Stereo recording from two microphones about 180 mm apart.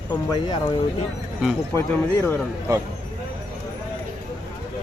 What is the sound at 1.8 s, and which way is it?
Speech, 5° left (ahead or behind).